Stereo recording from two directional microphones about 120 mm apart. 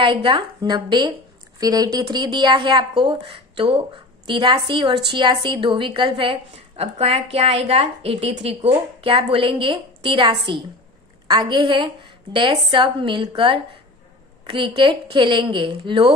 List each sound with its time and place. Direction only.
0.0 s a woman's voice: 45° right (ahead or behind)
14.4 s a woman's voice: 45° right (ahead or behind)